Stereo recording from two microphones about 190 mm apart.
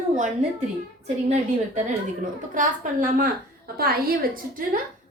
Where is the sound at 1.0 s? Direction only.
35° right (ahead or behind).